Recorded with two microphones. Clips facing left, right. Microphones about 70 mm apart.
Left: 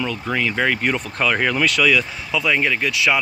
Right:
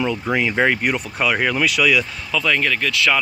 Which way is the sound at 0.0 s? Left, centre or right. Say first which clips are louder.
Right 2 dB; centre.